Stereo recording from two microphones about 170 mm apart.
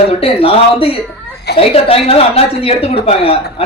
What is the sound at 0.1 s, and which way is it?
A man's voice, 35° left (ahead or behind).